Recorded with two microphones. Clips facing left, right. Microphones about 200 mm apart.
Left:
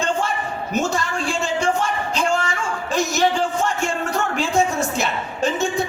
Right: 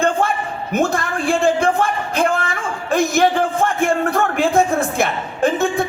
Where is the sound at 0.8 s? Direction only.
55° right (ahead or behind).